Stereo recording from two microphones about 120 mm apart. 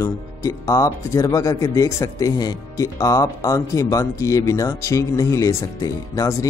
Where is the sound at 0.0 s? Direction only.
30° left (ahead or behind).